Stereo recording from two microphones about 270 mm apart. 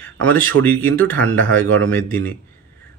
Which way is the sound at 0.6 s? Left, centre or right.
Right.